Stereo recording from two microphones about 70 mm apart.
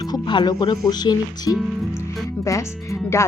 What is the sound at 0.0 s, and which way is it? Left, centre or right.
Speech, left.